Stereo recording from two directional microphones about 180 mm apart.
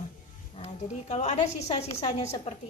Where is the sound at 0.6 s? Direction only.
40° left (ahead or behind).